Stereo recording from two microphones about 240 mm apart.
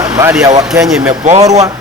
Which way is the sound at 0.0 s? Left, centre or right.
Centre.